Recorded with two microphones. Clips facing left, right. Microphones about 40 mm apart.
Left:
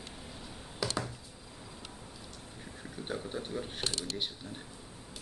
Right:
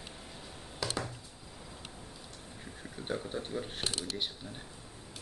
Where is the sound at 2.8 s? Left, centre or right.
Centre.